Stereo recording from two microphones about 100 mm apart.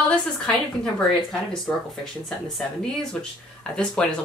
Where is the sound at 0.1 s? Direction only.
10° left (ahead or behind).